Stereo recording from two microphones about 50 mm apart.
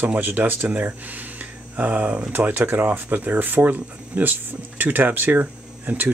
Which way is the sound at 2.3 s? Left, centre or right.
Right.